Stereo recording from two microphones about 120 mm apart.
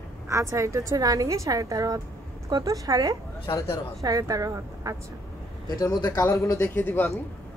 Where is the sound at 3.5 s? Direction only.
30° left (ahead or behind).